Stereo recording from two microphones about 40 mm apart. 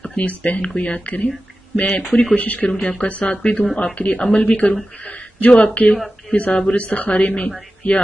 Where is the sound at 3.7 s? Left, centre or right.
Left.